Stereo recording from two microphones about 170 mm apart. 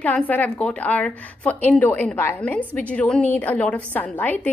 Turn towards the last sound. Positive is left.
turn(degrees=10)  # may be behind; listen again after turning